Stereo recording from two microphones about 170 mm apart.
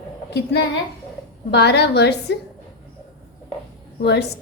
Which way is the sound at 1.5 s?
80° left.